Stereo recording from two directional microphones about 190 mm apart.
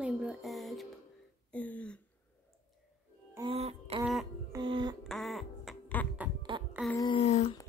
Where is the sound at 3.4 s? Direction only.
35° right (ahead or behind).